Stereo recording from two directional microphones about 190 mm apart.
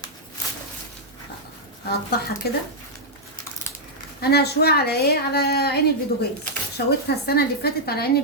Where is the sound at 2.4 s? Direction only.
55° left (ahead or behind).